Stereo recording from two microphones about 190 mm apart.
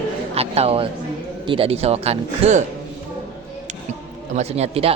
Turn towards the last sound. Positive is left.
turn(degrees=-30)  # may be behind; listen again after turning